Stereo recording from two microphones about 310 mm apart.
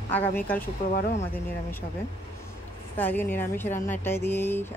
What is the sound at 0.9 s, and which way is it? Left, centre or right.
Speech, left.